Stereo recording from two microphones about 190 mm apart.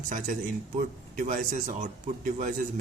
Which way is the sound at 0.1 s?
45° right (ahead or behind).